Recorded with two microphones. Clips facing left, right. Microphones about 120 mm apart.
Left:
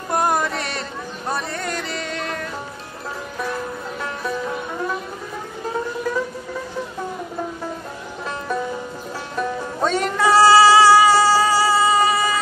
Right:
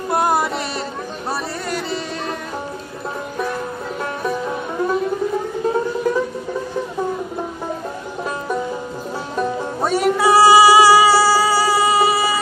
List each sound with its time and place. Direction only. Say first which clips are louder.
0.1 s music: right 2 dB; 10° right (ahead or behind)
9.8 s music: right 3 dB; 10° right (ahead or behind)